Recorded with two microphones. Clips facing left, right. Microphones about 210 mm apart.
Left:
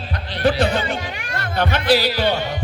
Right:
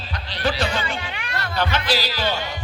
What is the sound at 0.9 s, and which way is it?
A man's voice, 45° left (ahead or behind).